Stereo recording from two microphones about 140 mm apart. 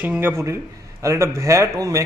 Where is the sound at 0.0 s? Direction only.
10° right (ahead or behind).